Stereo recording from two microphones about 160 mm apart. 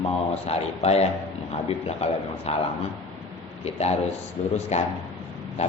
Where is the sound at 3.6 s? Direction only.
40° left (ahead or behind).